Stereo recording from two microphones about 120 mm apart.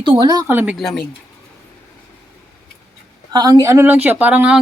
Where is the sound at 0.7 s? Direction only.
Centre (ahead or behind).